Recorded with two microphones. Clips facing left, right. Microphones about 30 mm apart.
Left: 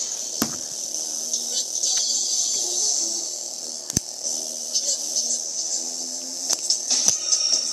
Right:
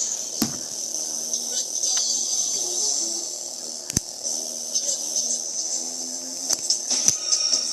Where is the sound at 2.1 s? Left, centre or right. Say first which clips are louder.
Left 1 dB; left.